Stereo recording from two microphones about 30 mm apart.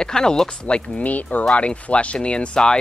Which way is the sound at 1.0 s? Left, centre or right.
Left.